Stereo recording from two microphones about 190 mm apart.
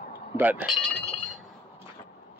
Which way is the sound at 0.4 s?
10° right (ahead or behind).